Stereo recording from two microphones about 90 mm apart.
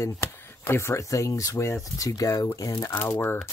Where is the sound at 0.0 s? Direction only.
30° left (ahead or behind).